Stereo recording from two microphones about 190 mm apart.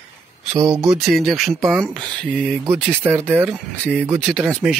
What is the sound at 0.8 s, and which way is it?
Speech, centre (ahead or behind).